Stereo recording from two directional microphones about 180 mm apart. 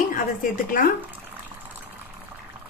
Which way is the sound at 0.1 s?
50° left (ahead or behind).